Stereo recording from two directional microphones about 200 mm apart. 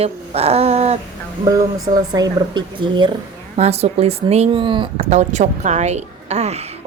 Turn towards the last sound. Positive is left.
turn(degrees=-35)  # may be behind; listen again after turning